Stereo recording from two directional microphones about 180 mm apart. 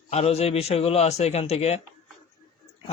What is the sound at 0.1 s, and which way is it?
Speech, 35° left (ahead or behind).